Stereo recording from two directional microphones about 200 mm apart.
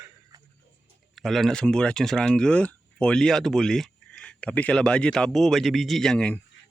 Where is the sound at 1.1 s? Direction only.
Centre (ahead or behind).